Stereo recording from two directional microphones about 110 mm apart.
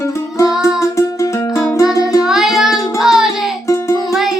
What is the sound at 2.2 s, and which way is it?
Music, 5° right (ahead or behind).